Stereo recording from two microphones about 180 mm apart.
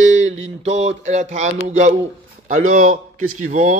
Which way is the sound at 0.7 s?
40° right (ahead or behind).